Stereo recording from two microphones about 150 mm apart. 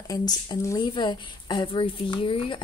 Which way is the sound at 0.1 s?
25° left (ahead or behind).